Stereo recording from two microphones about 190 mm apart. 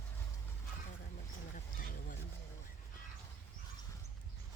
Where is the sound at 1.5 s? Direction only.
45° left (ahead or behind).